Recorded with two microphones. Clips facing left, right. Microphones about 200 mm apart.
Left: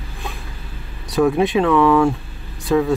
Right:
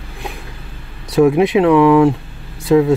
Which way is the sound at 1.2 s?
20° right (ahead or behind).